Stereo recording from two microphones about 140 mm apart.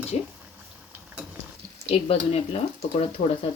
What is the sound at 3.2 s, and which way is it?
Speech, 65° left (ahead or behind).